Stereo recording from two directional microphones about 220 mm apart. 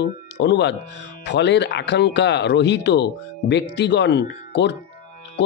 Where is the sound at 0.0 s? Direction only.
50° left (ahead or behind).